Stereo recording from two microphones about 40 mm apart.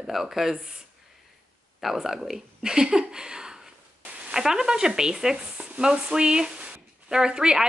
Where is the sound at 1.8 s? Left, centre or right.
Centre.